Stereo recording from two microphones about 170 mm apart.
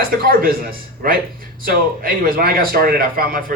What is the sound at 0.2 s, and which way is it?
A man's voice, 60° right (ahead or behind).